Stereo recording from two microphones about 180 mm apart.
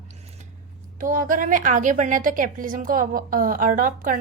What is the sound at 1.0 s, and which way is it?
A woman's voice, 50° right (ahead or behind).